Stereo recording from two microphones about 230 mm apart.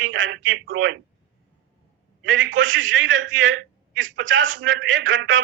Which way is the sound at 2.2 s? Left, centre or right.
Right.